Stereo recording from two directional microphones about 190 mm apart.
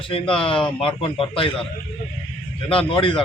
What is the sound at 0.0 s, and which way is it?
Speech, 25° left (ahead or behind).